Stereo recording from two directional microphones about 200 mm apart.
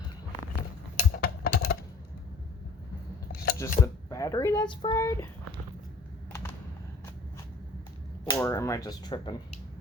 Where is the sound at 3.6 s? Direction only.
15° left (ahead or behind).